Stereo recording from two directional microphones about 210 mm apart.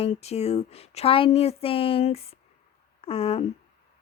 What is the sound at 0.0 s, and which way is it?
A woman's voice, 30° left (ahead or behind).